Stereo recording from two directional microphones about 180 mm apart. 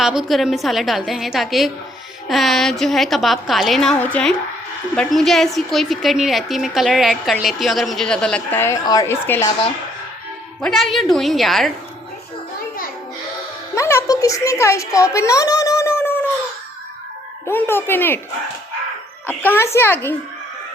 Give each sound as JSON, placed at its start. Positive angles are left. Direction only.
{"t": 0.0, "sound": "a woman's voice", "side_deg": -5}
{"t": 10.6, "sound": "a woman's voice", "side_deg": 5}
{"t": 13.7, "sound": "a child's voice", "side_deg": 15}
{"t": 17.4, "sound": "a woman's voice", "side_deg": 10}
{"t": 19.3, "sound": "a woman's voice", "side_deg": 10}